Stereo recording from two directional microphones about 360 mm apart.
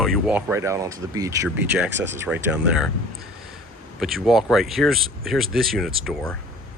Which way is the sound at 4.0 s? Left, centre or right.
Centre.